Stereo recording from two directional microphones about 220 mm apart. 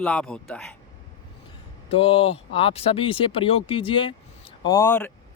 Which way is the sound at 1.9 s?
25° left (ahead or behind).